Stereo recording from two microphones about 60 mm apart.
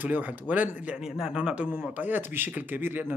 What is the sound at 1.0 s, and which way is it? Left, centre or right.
Speech, centre.